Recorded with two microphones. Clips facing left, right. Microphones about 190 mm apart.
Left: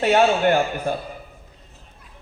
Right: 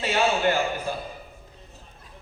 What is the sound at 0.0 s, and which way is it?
Speech, 55° left (ahead or behind).